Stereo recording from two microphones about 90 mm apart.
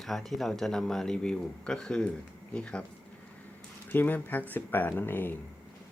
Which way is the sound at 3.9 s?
20° left (ahead or behind).